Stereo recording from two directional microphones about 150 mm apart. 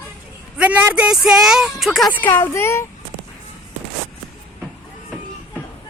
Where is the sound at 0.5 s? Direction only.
10° right (ahead or behind).